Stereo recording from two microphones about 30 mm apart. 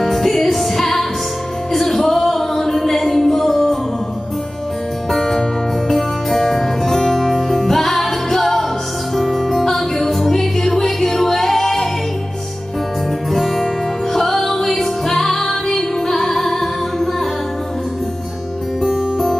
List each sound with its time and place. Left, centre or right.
0.0 s music: centre
5.1 s music: centre
13.3 s music: centre
18.8 s music: centre